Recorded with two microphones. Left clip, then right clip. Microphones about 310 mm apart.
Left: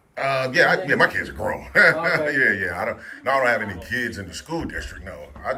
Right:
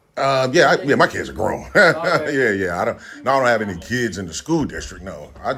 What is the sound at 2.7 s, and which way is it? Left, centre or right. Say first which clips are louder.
Speech: right 5 dB; centre.